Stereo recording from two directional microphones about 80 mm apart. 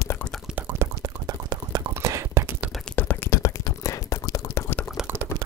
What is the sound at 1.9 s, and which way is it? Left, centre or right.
Beatboxing, right.